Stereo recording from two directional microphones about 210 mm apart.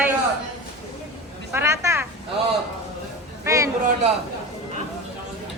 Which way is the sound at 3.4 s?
15° right (ahead or behind).